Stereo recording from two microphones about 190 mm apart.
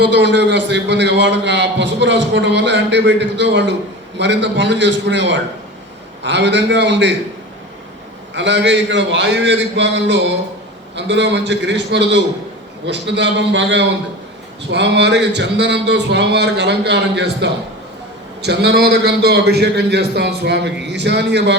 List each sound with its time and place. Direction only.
0.0 s a man's voice: 70° right (ahead or behind)
8.4 s a man's voice: 70° right (ahead or behind)